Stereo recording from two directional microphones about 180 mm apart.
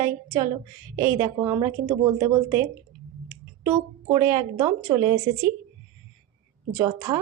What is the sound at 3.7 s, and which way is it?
A woman's voice, 15° right (ahead or behind).